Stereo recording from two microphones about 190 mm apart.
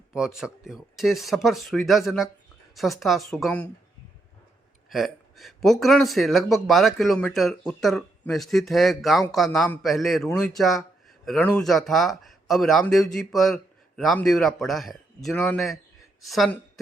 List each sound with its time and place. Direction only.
0.1 s speech: 5° right (ahead or behind)
4.9 s a woman's voice: centre (ahead or behind)